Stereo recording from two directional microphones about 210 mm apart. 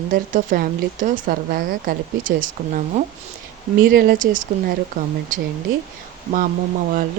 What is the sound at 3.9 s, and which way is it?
Speech, 45° right (ahead or behind).